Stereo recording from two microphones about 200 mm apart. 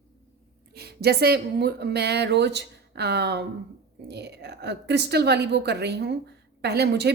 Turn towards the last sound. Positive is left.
turn(degrees=-55)  # may be behind; listen again after turning